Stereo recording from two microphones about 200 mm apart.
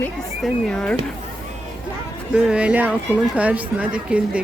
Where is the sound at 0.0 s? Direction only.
5° left (ahead or behind).